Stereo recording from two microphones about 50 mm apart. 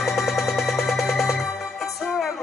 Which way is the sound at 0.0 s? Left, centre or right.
Centre.